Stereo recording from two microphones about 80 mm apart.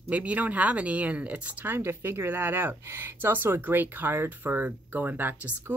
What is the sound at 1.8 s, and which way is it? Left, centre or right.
Speech, right.